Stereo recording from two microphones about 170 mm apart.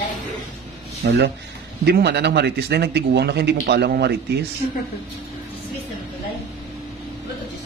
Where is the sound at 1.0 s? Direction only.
80° right.